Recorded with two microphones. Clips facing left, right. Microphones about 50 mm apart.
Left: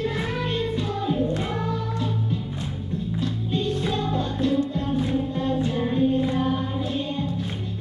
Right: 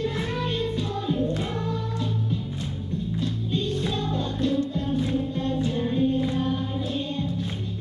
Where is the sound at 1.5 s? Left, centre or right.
Left.